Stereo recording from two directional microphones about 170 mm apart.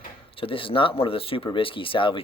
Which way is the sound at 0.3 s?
30° left (ahead or behind).